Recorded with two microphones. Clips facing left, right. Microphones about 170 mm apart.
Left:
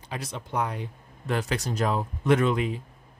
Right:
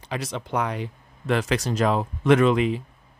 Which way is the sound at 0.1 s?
90° right.